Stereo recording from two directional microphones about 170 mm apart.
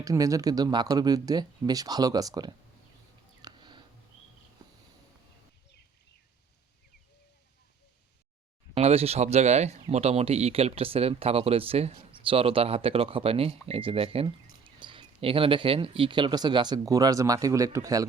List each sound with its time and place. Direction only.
0.0 s speech: 20° right (ahead or behind)
3.4 s a sound: 25° right (ahead or behind)
8.7 s speech: 35° right (ahead or behind); by 18.0 s 20° right (ahead or behind)